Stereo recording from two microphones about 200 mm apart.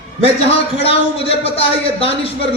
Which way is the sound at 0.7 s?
30° left (ahead or behind).